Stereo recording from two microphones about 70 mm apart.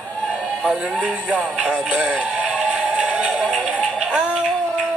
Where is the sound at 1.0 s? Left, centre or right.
Centre.